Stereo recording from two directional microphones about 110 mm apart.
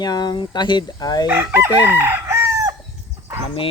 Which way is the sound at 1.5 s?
20° right (ahead or behind).